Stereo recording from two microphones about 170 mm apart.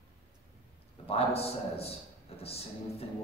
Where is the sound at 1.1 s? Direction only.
35° left (ahead or behind).